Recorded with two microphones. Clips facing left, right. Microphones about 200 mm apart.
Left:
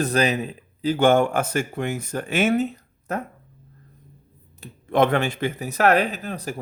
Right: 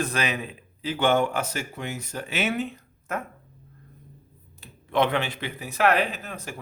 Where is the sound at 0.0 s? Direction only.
35° left (ahead or behind).